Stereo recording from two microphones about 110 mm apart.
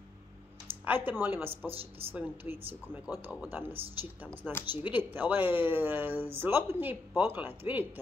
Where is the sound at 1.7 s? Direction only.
60° right (ahead or behind).